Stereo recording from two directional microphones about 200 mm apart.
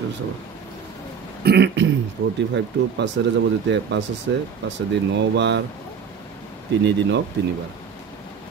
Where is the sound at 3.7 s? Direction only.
60° right (ahead or behind).